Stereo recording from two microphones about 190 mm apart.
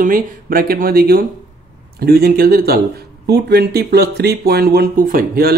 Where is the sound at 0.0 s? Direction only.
50° right (ahead or behind).